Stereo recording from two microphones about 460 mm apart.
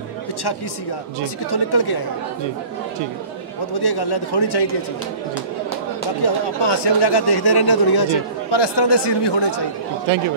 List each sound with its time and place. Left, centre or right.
1.2 s speech: left
3.8 s speech: left
6.2 s speech: left